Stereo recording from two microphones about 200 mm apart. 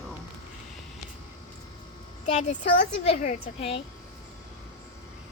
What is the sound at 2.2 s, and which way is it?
A woman's voice, 35° left (ahead or behind).